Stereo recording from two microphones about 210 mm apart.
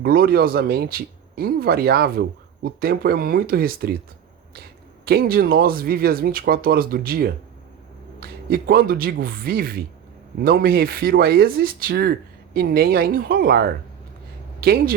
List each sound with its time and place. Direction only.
0.0 s speech: 45° right (ahead or behind)
5.0 s speech: 45° right (ahead or behind)